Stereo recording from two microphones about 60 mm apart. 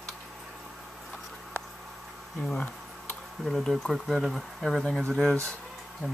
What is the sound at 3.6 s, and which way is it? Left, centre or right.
Speech, centre.